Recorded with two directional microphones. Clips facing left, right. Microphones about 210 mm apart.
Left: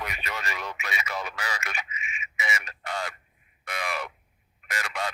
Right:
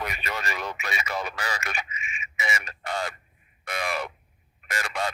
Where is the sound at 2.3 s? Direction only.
30° right (ahead or behind).